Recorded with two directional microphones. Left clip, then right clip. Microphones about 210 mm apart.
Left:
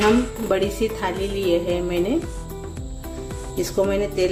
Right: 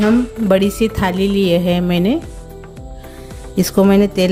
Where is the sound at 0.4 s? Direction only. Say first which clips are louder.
Right 9 dB; 50° right (ahead or behind).